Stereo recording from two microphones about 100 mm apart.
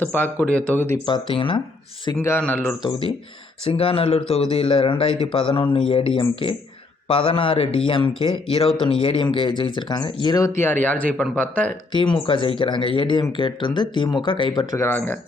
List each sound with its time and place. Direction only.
0.0 s speech: 20° left (ahead or behind)
1.0 s speech: 60° left (ahead or behind)
2.1 s speech: 20° left (ahead or behind)
3.7 s a man's voice: 70° left (ahead or behind); by 10.4 s 45° left (ahead or behind)
10.4 s speech: 20° left (ahead or behind)
11.9 s speech: 55° left (ahead or behind)
14.8 s speech: 25° left (ahead or behind)